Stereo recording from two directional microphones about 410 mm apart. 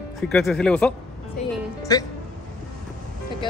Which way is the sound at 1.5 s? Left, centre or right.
Centre.